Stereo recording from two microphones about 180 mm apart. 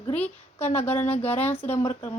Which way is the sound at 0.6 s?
35° left (ahead or behind).